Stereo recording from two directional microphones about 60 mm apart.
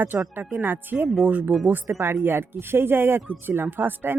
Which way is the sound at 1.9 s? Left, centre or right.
Right.